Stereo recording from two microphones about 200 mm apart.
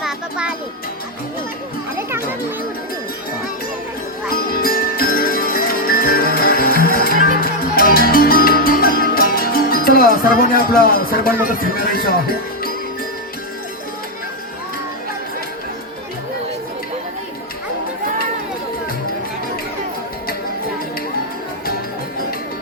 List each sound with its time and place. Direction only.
2.0 s children playing: 15° right (ahead or behind)
4.3 s music: 45° left (ahead or behind)
7.1 s music: 40° right (ahead or behind)
7.8 s music: 45° left (ahead or behind)